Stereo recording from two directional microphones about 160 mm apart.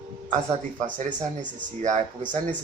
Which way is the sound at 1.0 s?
50° right (ahead or behind).